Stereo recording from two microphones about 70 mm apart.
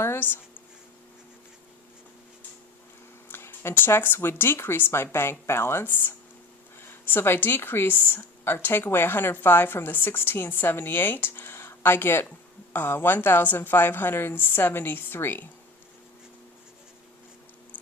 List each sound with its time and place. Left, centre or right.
0.0 s speech: left
3.2 s speech: left